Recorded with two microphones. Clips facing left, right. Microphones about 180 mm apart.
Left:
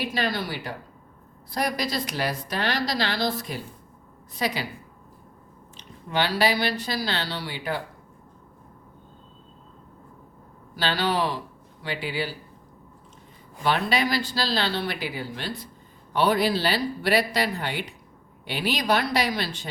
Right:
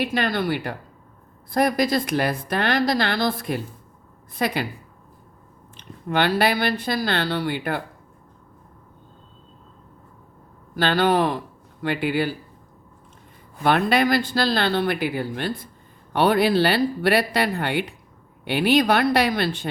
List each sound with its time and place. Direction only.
0.0 s a woman's voice: 55° right (ahead or behind)
5.7 s speech: 55° right (ahead or behind)
10.8 s a woman's voice: 55° right (ahead or behind)
13.6 s speech: 55° right (ahead or behind)